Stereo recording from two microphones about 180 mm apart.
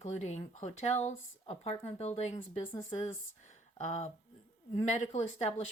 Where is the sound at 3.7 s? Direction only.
40° left (ahead or behind).